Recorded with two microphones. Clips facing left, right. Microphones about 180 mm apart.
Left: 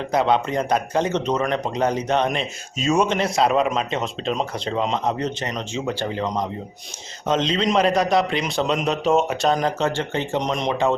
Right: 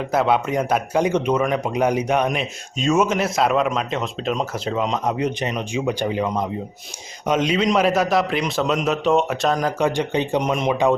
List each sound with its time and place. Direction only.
0.1 s speech: 5° right (ahead or behind)
9.8 s speech: 15° right (ahead or behind)